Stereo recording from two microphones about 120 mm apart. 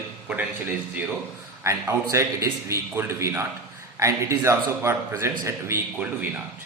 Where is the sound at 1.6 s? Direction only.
20° right (ahead or behind).